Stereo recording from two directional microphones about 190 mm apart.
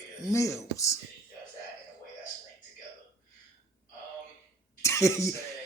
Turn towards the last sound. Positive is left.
turn(degrees=15)  # may be behind; listen again after turning